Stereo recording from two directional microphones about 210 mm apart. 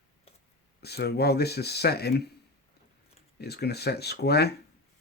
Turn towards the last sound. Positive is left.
turn(degrees=50)  # may be behind; listen again after turning